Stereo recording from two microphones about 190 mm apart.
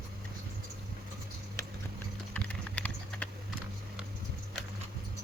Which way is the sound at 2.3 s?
5° left (ahead or behind).